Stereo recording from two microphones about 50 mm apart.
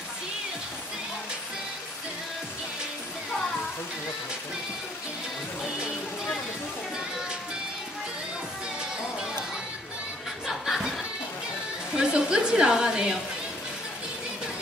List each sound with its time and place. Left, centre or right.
10.4 s chuckle: centre
11.9 s a woman's voice: centre